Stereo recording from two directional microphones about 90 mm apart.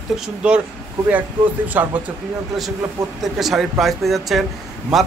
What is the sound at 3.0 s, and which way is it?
Speech, 45° right (ahead or behind).